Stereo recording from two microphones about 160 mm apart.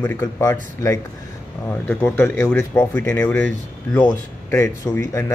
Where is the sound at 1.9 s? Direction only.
10° left (ahead or behind).